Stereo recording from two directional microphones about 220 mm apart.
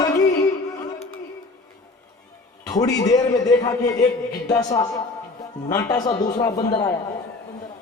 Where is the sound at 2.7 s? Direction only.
15° left (ahead or behind).